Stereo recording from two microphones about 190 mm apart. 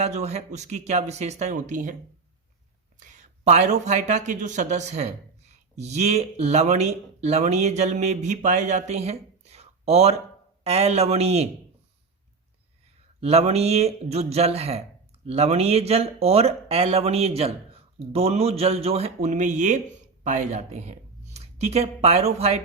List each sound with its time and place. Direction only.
0.0 s speech: 35° right (ahead or behind)
3.0 s a man's voice: 40° right (ahead or behind)
13.1 s speech: 35° right (ahead or behind)